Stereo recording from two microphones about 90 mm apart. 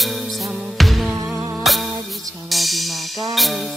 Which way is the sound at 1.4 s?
35° right (ahead or behind).